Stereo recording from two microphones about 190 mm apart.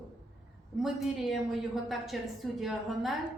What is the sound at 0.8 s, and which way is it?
A woman's voice, centre (ahead or behind).